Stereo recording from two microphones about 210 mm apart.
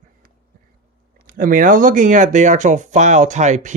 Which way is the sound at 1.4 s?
40° right (ahead or behind).